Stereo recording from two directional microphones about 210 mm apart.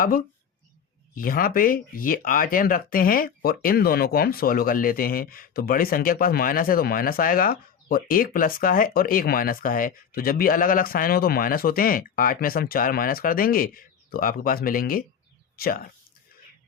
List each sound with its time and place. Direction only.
1.1 s speech: 45° left (ahead or behind)